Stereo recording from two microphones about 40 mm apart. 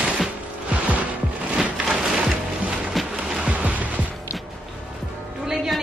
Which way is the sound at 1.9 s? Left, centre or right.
Centre.